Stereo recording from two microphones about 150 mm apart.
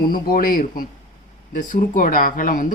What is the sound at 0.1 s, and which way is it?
A woman's voice, 75° left (ahead or behind).